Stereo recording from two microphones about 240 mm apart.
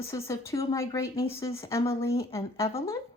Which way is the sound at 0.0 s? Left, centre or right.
Centre.